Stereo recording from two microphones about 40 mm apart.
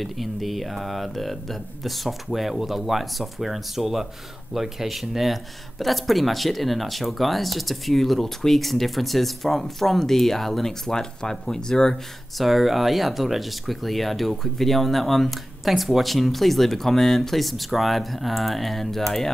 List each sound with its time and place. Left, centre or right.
0.0 s speech: centre
10.9 s speech: centre
12.4 s speech: centre